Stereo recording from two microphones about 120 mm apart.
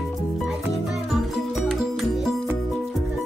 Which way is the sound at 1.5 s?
Centre (ahead or behind).